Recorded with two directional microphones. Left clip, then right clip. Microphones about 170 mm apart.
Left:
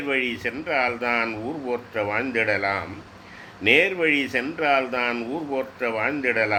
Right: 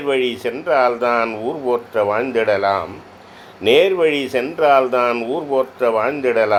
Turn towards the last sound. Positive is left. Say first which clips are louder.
# right 6 dB
turn(degrees=-20)  # may be behind; listen again after turning